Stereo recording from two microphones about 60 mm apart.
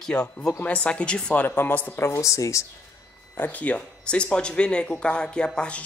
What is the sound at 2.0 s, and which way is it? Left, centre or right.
Speech, left.